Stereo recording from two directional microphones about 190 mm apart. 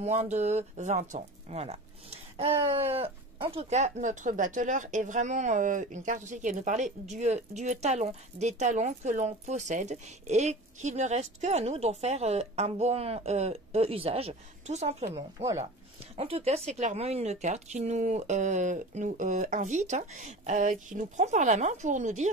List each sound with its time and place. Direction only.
0.0 s speech: 35° right (ahead or behind)
15.3 s speech: 20° right (ahead or behind)
16.2 s speech: 30° right (ahead or behind)